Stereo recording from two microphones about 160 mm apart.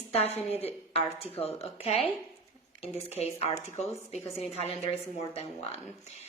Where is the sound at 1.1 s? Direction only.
40° left (ahead or behind).